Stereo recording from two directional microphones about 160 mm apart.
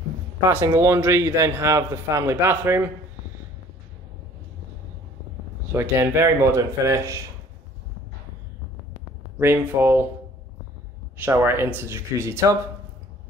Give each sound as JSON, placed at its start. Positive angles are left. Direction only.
{"t": 0.5, "sound": "a man's voice", "side_deg": -15}
{"t": 5.7, "sound": "a man's voice", "side_deg": -15}
{"t": 9.4, "sound": "a man's voice", "side_deg": -15}
{"t": 11.2, "sound": "a man's voice", "side_deg": -15}